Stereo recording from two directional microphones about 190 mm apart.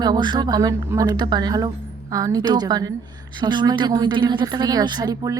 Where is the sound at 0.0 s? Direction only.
20° right (ahead or behind).